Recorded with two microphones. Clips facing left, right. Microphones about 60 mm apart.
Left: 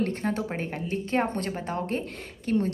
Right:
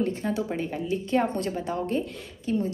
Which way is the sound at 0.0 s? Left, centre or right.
Left.